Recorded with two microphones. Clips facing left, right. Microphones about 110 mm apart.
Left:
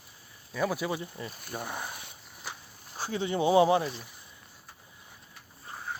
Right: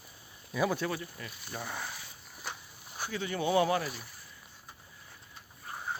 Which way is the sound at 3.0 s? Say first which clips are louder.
Left 5 dB; 30° left (ahead or behind).